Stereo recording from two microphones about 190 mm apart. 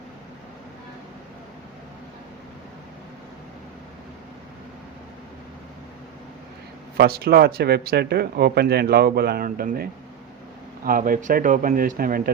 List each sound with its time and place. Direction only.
6.9 s speech: 55° right (ahead or behind)